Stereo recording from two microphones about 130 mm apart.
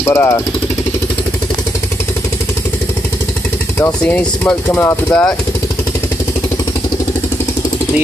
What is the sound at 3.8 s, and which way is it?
Speech, 10° left (ahead or behind).